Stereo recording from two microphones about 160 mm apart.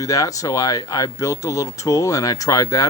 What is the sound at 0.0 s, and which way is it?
Speech, 20° left (ahead or behind).